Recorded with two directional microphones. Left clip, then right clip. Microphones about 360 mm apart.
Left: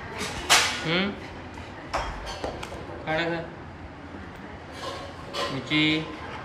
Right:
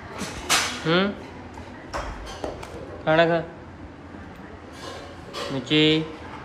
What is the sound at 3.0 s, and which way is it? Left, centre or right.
Speech, centre.